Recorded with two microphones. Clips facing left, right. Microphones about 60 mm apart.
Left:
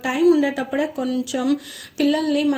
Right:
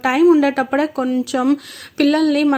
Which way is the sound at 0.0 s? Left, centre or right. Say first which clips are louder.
Right 4 dB; right.